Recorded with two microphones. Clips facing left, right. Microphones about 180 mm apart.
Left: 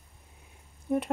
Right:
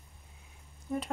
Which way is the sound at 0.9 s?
60° left (ahead or behind).